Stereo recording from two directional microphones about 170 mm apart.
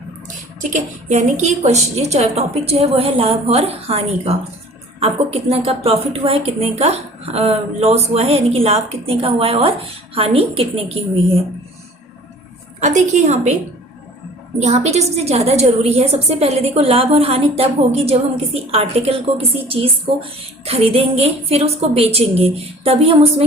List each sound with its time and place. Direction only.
0.3 s a woman's voice: 45° right (ahead or behind)
12.8 s a woman's voice: 45° right (ahead or behind)
14.6 s a woman's voice: 40° right (ahead or behind)